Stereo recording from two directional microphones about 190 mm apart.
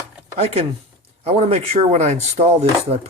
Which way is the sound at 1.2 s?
35° right (ahead or behind).